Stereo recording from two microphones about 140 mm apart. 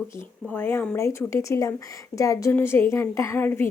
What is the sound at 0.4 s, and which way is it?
Speech, 15° left (ahead or behind).